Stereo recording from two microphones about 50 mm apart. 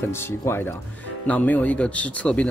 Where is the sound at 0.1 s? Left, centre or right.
Left.